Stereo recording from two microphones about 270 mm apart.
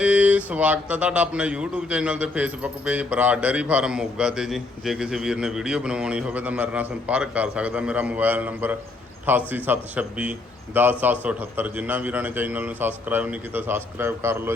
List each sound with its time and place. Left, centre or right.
0.0 s a man's voice: centre